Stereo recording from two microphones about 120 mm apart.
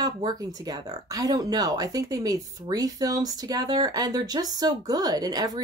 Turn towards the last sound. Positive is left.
turn(degrees=-35)  # may be behind; listen again after turning